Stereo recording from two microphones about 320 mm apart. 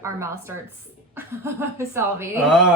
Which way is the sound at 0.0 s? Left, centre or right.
Centre.